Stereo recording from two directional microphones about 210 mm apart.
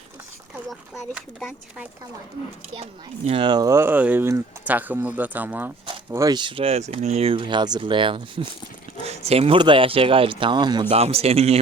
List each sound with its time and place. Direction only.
1.1 s speech: 5° right (ahead or behind)
2.7 s speech: 30° right (ahead or behind)